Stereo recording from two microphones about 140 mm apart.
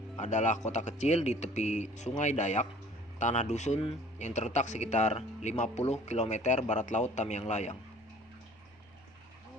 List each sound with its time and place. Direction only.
0.2 s speech: 60° left (ahead or behind)